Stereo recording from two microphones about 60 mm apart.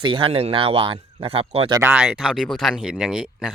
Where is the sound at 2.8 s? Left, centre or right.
Centre.